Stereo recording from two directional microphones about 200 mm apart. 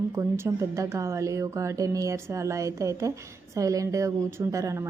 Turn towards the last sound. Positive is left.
turn(degrees=-15)  # may be behind; listen again after turning